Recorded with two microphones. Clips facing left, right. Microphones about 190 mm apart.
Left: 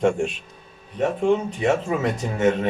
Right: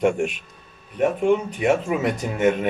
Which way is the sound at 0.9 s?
10° right (ahead or behind).